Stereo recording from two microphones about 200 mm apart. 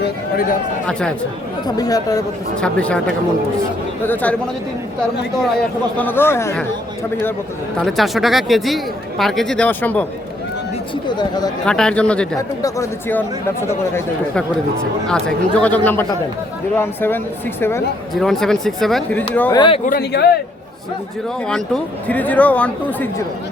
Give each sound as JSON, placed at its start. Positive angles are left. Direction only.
{"t": 0.0, "sound": "speech", "side_deg": 50}
{"t": 0.9, "sound": "speech", "side_deg": 5}
{"t": 1.6, "sound": "speech", "side_deg": 20}
{"t": 2.6, "sound": "speech", "side_deg": 5}
{"t": 4.0, "sound": "speech", "side_deg": 10}
{"t": 6.0, "sound": "speech", "side_deg": 10}
{"t": 7.9, "sound": "speech", "side_deg": 0}
{"t": 11.2, "sound": "speech", "side_deg": 20}
{"t": 11.6, "sound": "speech", "side_deg": 5}
{"t": 12.4, "sound": "speech", "side_deg": 15}
{"t": 18.1, "sound": "speech", "side_deg": 0}
{"t": 19.5, "sound": "speech", "side_deg": 25}
{"t": 19.8, "sound": "speech", "side_deg": 50}
{"t": 21.4, "sound": "speech", "side_deg": 5}